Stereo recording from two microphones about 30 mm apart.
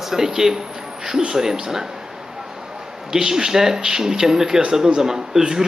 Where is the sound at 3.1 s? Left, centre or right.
Centre.